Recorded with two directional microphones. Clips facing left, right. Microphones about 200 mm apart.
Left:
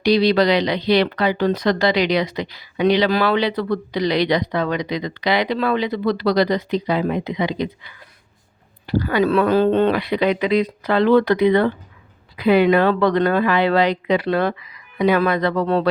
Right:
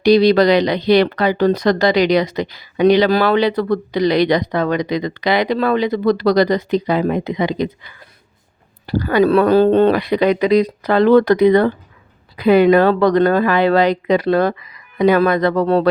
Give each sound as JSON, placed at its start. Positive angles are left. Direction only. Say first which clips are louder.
{"t": 0.0, "sound": "speech", "louder": "right 5 dB", "side_deg": -45}